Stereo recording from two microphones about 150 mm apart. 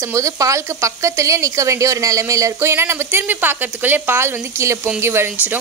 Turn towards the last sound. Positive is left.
turn(degrees=-15)  # may be behind; listen again after turning